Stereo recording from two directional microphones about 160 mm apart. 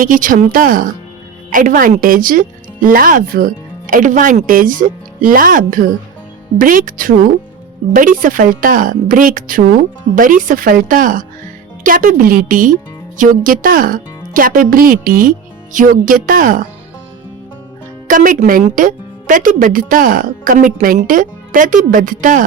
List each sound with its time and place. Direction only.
0.0 s a woman's voice: 55° right (ahead or behind)
18.1 s a woman's voice: 55° right (ahead or behind)